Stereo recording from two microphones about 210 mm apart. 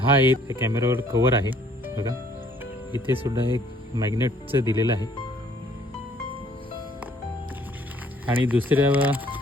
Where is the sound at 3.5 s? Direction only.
20° right (ahead or behind).